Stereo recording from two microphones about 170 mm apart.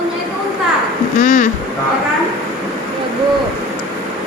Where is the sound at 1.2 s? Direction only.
50° left (ahead or behind).